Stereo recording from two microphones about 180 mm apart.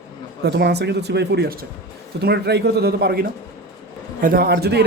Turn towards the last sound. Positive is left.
turn(degrees=-65)  # may be behind; listen again after turning